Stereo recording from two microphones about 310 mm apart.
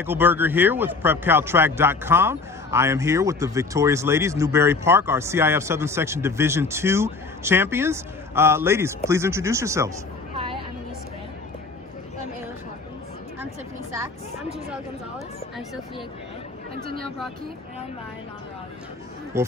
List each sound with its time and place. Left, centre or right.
0.0 s speech: centre
14.7 s speech: centre
16.7 s speech: right